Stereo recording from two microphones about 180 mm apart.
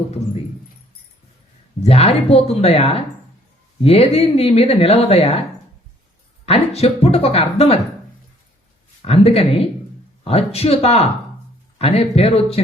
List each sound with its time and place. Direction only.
1.8 s speech: 35° left (ahead or behind)
9.0 s speech: 35° left (ahead or behind)